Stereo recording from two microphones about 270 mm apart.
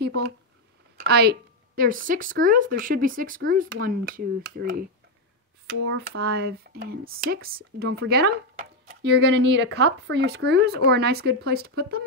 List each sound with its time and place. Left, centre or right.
0.0 s speech: right
6.0 s speech: right